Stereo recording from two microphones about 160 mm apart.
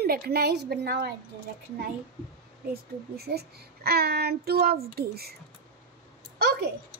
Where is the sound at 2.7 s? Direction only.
80° right.